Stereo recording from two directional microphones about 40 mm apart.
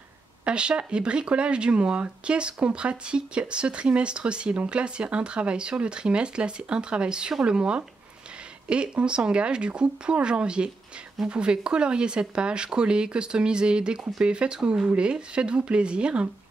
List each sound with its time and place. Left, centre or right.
0.5 s speech: right